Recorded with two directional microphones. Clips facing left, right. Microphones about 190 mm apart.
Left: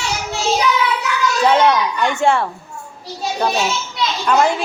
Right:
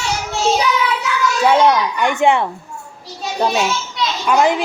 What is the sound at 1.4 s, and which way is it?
A woman's voice, 10° right (ahead or behind).